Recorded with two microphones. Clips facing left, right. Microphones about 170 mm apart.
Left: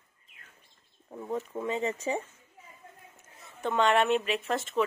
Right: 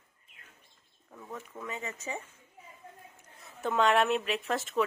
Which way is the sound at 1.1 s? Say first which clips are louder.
Left 9 dB; 30° left (ahead or behind).